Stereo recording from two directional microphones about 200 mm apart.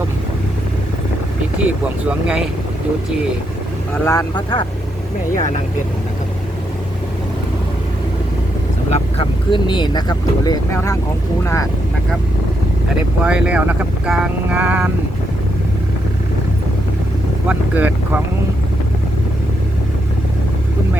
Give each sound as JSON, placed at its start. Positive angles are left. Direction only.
{"t": 2.0, "sound": "speech", "side_deg": -5}
{"t": 4.0, "sound": "speech", "side_deg": 15}
{"t": 8.9, "sound": "speech", "side_deg": 25}
{"t": 13.2, "sound": "speech", "side_deg": -5}
{"t": 17.5, "sound": "speech", "side_deg": -10}